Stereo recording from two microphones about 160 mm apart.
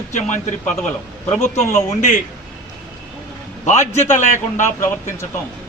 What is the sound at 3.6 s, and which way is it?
Speech, 45° left (ahead or behind).